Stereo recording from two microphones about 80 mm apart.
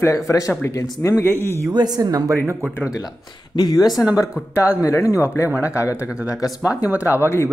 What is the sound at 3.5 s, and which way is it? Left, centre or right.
Speech, left.